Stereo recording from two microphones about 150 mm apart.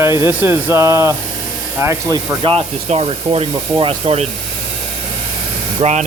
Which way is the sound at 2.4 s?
40° right (ahead or behind).